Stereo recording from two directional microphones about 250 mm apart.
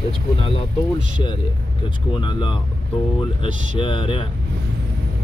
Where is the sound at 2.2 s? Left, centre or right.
Centre.